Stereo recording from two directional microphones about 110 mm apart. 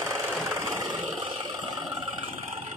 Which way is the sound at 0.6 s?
30° right (ahead or behind).